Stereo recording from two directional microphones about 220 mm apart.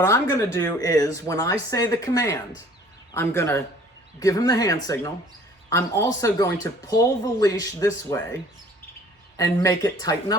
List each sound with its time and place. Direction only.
0.0 s speech: 15° left (ahead or behind)
9.4 s speech: 15° left (ahead or behind)